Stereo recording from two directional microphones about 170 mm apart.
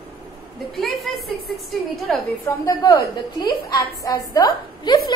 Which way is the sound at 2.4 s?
20° left (ahead or behind).